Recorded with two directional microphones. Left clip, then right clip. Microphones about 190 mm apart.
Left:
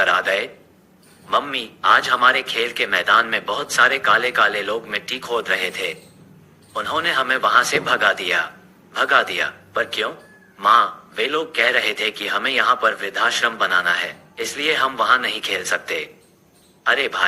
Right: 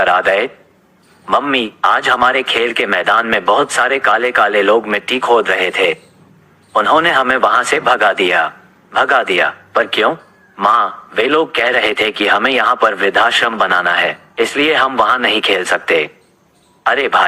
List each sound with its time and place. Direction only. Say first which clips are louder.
0.0 s a man's voice: right 6 dB; 20° left (ahead or behind)